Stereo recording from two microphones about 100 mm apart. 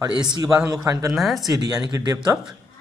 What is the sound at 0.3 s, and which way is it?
Speech, 35° right (ahead or behind).